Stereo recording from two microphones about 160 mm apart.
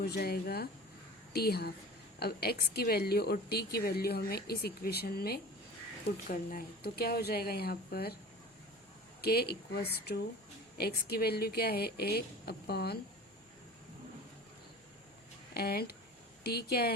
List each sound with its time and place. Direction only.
0.0 s a woman's voice: 80° left
6.1 s a woman's voice: 65° left (ahead or behind)
9.2 s a woman's voice: 80° left
15.5 s speech: 80° left
16.4 s a woman's voice: 85° left